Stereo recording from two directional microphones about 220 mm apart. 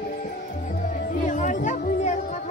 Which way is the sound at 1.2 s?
35° left (ahead or behind).